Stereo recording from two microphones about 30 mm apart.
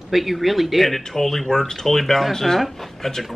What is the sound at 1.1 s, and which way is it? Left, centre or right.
Speech, centre.